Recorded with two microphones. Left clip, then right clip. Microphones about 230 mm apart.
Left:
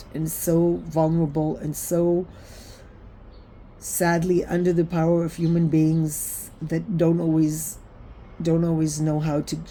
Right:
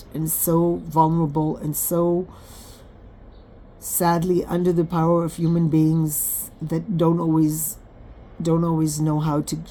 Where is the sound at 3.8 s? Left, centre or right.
Right.